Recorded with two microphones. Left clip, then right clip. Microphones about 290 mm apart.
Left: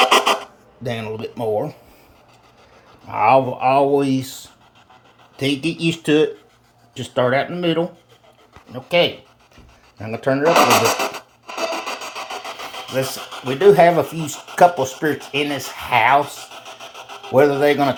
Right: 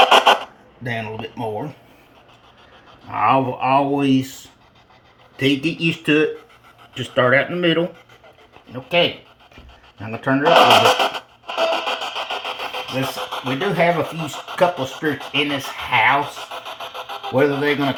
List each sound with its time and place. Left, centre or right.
0.0 s filing: centre
3.1 s speech: centre
5.4 s speech: centre
10.4 s vehicle: centre
14.8 s speech: centre